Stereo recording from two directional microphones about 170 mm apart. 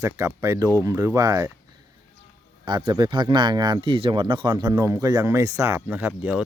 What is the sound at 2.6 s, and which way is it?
Speech, 25° right (ahead or behind).